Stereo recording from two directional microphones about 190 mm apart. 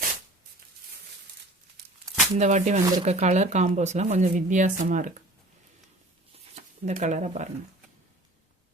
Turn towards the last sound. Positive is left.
turn(degrees=-40)  # may be behind; listen again after turning